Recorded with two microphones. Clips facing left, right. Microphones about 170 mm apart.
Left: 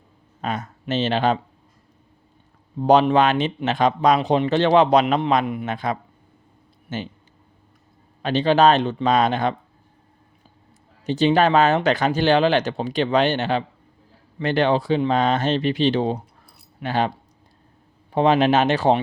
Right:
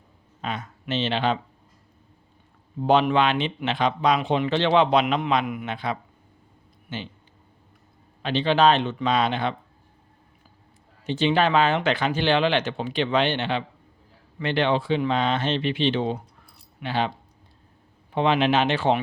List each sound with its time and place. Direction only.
0.4 s speech: 45° left (ahead or behind)
2.8 s speech: 40° left (ahead or behind)
8.2 s speech: 45° left (ahead or behind)
11.0 s speech: 40° left (ahead or behind)
18.1 s speech: 40° left (ahead or behind)